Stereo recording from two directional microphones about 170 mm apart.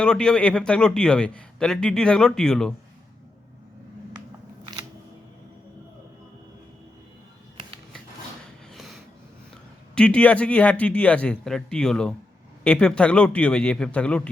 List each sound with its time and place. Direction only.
0.0 s a man's voice: 5° left (ahead or behind)
8.7 s a sound: centre (ahead or behind)
9.9 s a man's voice: 5° left (ahead or behind)